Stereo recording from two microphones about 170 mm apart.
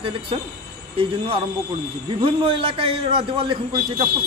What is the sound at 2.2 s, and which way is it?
A man's voice, 30° right (ahead or behind).